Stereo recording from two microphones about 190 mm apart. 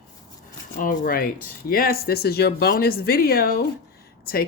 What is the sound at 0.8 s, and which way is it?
Speech, 45° left (ahead or behind).